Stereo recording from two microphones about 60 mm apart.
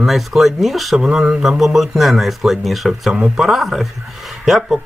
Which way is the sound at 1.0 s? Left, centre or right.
Centre.